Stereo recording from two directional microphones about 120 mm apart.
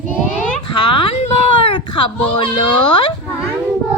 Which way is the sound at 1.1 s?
55° left (ahead or behind).